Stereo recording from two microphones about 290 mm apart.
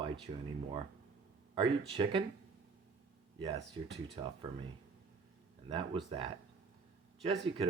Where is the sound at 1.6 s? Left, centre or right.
Centre.